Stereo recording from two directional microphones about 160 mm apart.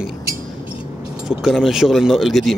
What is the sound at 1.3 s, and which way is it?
Speech, centre (ahead or behind).